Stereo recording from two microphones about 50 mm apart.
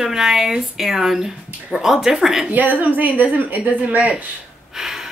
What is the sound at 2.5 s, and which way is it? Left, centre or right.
A woman's voice, right.